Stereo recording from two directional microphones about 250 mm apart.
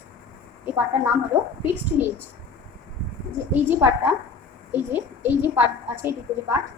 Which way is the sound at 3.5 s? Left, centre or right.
Centre.